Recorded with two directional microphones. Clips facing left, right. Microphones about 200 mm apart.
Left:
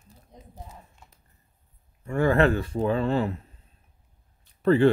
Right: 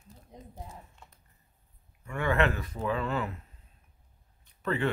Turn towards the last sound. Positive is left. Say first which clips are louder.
# left 11 dB
turn(degrees=30)  # may be behind; listen again after turning